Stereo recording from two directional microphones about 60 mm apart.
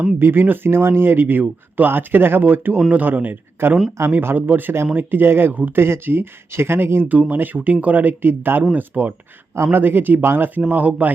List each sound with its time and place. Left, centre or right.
0.2 s speech: right
7.1 s speech: right